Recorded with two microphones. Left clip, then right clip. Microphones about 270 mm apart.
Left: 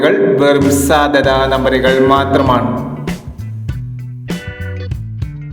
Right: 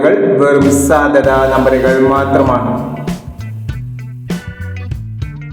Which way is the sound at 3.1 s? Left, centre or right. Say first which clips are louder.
Even; centre.